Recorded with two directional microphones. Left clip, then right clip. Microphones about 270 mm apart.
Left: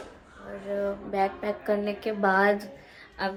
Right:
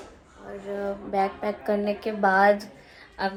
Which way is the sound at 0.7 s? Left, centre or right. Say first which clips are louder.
Even; centre.